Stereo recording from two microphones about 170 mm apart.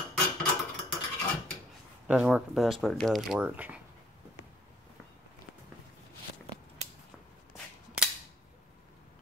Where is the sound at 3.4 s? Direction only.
10° right (ahead or behind).